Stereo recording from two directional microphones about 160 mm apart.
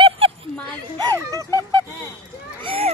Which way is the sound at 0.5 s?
10° left (ahead or behind).